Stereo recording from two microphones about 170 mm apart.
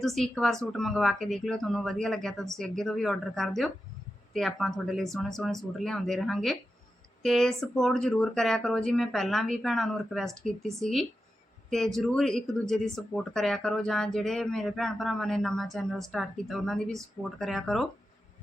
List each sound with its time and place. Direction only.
0.0 s speech: centre (ahead or behind)